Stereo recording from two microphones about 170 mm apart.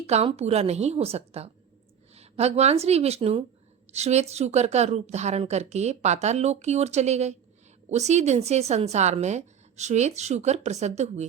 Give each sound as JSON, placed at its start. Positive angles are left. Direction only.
{"t": 0.1, "sound": "speech", "side_deg": -40}